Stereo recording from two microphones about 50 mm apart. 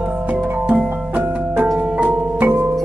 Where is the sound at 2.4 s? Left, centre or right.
Right.